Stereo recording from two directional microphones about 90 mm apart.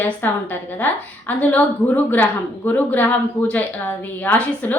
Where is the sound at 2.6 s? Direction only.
20° left (ahead or behind).